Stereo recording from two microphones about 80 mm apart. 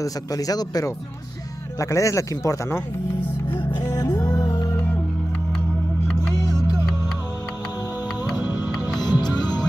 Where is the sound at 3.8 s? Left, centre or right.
Left.